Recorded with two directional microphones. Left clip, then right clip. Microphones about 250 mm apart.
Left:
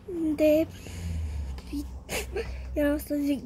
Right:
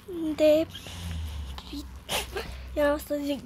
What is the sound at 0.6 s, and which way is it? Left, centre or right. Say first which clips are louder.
Speech: left 1 dB; right.